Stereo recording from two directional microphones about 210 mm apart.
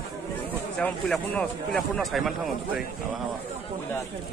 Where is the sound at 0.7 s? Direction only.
5° left (ahead or behind).